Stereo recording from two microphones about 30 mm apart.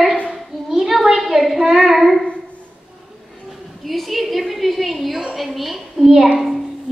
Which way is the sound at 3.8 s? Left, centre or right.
Centre.